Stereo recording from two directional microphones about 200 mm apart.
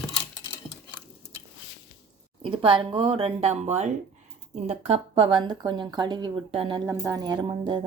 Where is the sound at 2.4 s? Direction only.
25° right (ahead or behind).